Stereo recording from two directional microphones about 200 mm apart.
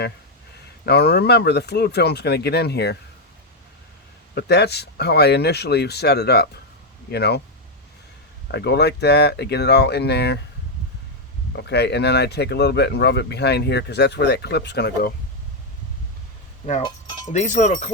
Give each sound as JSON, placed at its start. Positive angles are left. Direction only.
{"t": 0.9, "sound": "speech", "side_deg": 55}
{"t": 4.4, "sound": "speech", "side_deg": 55}
{"t": 8.5, "sound": "speech", "side_deg": 55}
{"t": 11.5, "sound": "speech", "side_deg": 60}
{"t": 17.2, "sound": "speech", "side_deg": 35}